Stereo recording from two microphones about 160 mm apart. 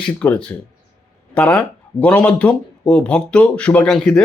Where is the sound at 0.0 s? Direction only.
5° left (ahead or behind).